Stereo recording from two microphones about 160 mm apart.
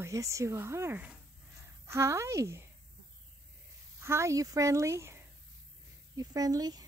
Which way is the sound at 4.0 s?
15° right (ahead or behind).